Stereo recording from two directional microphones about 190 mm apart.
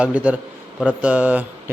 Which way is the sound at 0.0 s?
5° right (ahead or behind).